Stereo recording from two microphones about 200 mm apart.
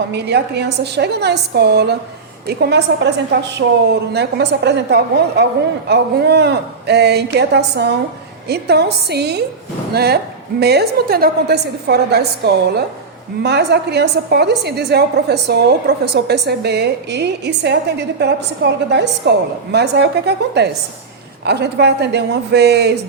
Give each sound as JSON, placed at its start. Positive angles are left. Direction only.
{"t": 0.1, "sound": "a woman's voice", "side_deg": -55}